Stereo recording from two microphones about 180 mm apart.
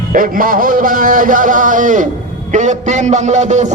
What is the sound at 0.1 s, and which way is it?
A man's voice, 50° right (ahead or behind).